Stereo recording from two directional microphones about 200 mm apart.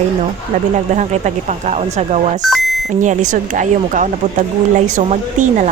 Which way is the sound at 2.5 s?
Centre (ahead or behind).